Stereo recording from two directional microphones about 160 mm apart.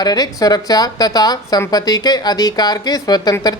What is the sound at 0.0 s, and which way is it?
A woman's voice, 25° left (ahead or behind).